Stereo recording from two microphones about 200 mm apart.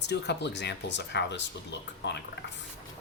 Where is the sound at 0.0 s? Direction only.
60° left (ahead or behind).